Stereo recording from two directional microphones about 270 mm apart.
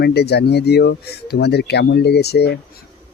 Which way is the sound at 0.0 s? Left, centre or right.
Left.